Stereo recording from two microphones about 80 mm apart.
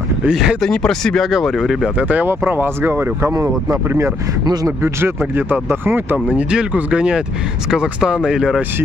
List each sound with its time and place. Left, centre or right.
0.3 s speech: centre
0.7 s speech: centre
2.0 s speech: centre
2.2 s speech: right
6.2 s speech: centre